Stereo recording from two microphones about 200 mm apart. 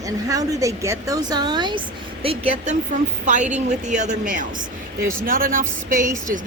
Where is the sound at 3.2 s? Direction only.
35° right (ahead or behind).